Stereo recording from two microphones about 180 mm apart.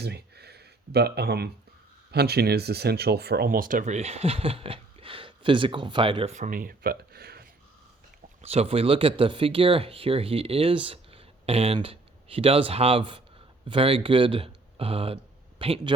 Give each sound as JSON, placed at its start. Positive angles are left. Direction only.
{"t": 0.0, "sound": "a sound", "side_deg": -65}
{"t": 2.1, "sound": "speech", "side_deg": -65}
{"t": 6.3, "sound": "speech", "side_deg": -45}
{"t": 8.4, "sound": "speech", "side_deg": -35}